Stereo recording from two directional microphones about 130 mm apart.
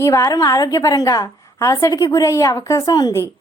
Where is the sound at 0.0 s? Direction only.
25° left (ahead or behind).